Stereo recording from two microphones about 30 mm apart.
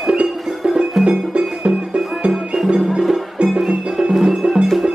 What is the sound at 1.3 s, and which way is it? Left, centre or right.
Music, right.